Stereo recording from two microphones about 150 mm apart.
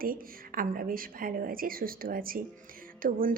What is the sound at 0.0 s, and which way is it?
A woman's voice, 70° right (ahead or behind).